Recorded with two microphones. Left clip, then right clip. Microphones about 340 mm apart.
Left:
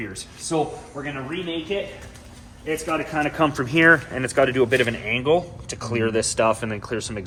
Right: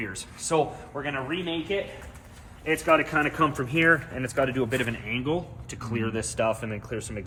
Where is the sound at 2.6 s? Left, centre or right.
Centre.